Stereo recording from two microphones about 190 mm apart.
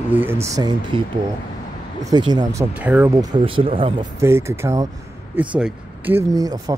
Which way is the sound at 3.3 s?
30° right (ahead or behind).